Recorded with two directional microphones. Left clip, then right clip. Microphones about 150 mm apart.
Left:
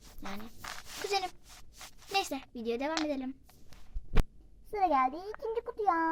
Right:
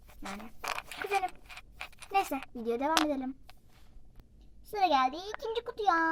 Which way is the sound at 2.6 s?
20° left (ahead or behind).